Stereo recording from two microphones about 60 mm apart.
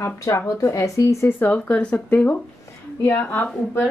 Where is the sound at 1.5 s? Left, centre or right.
Left.